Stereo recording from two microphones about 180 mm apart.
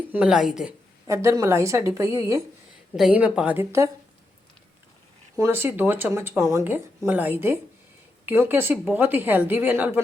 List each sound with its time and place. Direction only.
0.1 s a woman's voice: 5° right (ahead or behind)
1.0 s speech: 15° right (ahead or behind)
2.9 s speech: 5° right (ahead or behind)
5.4 s speech: 15° right (ahead or behind)